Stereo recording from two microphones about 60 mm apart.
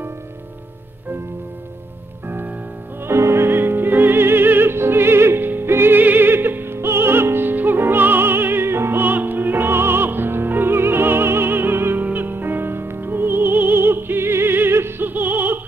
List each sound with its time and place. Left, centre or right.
2.2 s music: right
3.1 s music: right
15.0 s opera: right